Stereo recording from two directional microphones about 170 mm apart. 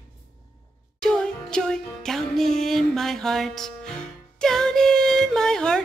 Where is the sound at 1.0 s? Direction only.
5° left (ahead or behind).